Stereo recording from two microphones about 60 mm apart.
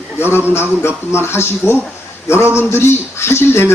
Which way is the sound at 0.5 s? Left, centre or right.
Left.